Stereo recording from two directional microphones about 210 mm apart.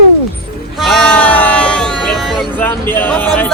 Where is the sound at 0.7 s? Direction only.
Centre (ahead or behind).